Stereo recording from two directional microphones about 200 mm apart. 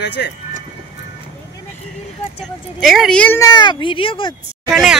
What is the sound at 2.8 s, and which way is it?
A woman's voice, centre (ahead or behind).